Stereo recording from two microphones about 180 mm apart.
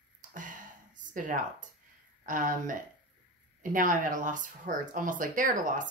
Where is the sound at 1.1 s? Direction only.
45° right (ahead or behind).